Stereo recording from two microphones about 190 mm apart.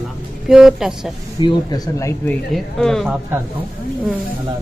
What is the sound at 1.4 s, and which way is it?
Speech, 20° left (ahead or behind).